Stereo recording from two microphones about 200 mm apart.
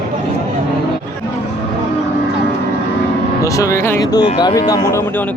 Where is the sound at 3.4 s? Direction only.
15° left (ahead or behind).